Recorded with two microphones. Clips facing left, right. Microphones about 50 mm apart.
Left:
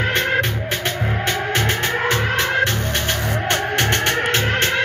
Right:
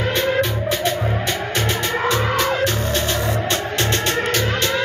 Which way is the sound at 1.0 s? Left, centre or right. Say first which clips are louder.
Even; left.